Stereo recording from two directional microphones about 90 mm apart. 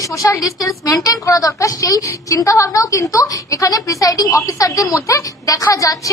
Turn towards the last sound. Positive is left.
turn(degrees=40)  # may be behind; listen again after turning